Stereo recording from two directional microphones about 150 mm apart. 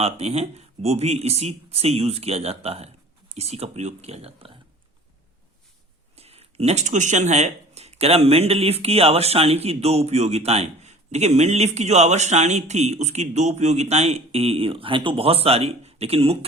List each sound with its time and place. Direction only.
0.0 s speech: 45° right (ahead or behind)
6.1 s speech: 45° right (ahead or behind)